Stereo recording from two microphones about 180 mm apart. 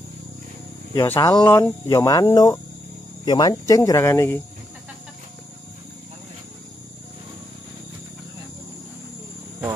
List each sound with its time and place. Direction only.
0.9 s speech: 15° left (ahead or behind)